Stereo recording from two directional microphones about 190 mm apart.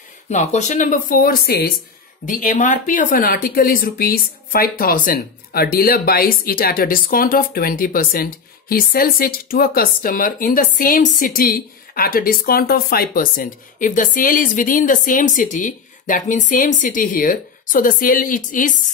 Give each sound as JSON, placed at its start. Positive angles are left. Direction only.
{"t": 0.3, "sound": "speech", "side_deg": 40}
{"t": 2.2, "sound": "speech", "side_deg": 45}